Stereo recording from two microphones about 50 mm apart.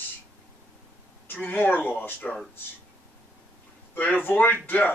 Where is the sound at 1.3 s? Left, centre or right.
Left.